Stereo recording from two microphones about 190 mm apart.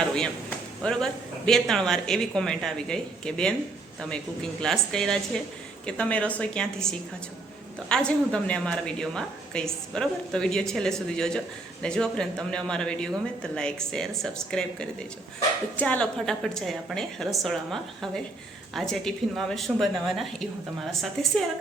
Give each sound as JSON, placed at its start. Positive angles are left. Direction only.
{"t": 0.0, "sound": "a sound", "side_deg": 5}
{"t": 0.8, "sound": "speech", "side_deg": 5}
{"t": 4.6, "sound": "speech", "side_deg": 5}